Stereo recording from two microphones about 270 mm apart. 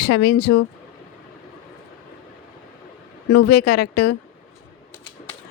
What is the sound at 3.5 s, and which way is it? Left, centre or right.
Speech, left.